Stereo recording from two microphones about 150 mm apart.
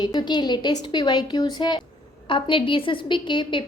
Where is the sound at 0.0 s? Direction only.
25° left (ahead or behind).